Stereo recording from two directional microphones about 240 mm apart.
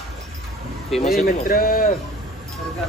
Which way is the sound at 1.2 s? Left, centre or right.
Left.